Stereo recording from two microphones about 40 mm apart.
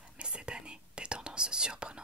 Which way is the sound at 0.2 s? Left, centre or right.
Right.